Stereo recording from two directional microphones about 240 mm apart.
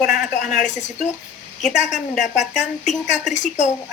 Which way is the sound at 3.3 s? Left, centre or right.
Left.